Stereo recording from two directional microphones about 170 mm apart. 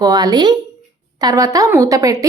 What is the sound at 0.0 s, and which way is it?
A woman's voice, 25° right (ahead or behind).